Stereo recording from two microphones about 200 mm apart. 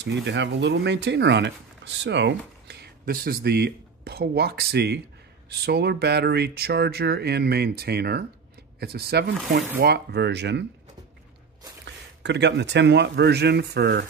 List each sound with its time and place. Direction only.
0.0 s speech: 60° right (ahead or behind)
11.8 s speech: 60° right (ahead or behind)